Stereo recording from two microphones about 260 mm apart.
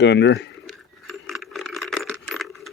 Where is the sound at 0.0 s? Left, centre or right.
Left.